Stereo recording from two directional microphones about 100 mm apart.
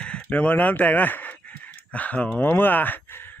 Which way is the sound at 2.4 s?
20° left (ahead or behind).